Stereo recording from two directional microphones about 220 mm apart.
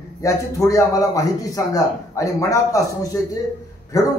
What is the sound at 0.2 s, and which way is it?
A man's voice, 15° left (ahead or behind).